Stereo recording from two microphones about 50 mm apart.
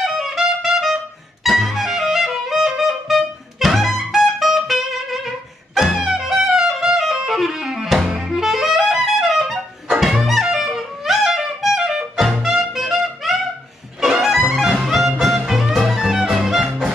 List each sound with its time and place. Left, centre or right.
0.0 s music: centre